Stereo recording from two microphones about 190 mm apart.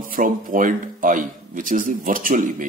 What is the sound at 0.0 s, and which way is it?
Speech, 45° right (ahead or behind).